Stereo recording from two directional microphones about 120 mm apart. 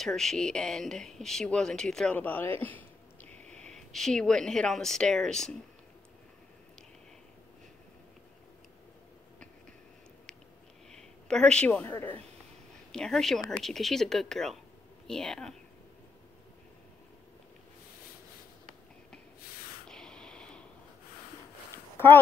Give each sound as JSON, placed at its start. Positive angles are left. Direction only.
{"t": 0.0, "sound": "speech", "side_deg": 5}
{"t": 2.1, "sound": "speech", "side_deg": 15}
{"t": 11.0, "sound": "a woman's voice", "side_deg": 5}
{"t": 12.9, "sound": "speech", "side_deg": 5}
{"t": 19.9, "sound": "spray", "side_deg": 5}
{"t": 21.9, "sound": "a sound", "side_deg": 20}